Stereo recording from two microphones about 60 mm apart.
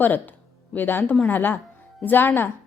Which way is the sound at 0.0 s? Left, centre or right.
Left.